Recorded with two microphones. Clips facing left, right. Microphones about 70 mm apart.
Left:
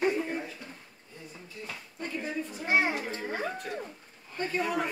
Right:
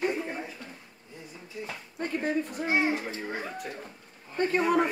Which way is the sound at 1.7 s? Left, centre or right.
Right.